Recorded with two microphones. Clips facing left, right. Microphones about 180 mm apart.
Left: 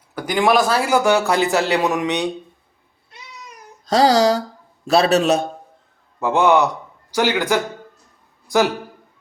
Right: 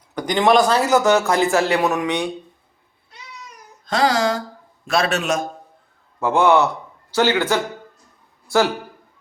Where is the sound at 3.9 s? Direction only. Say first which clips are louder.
Left 4 dB; 35° left (ahead or behind).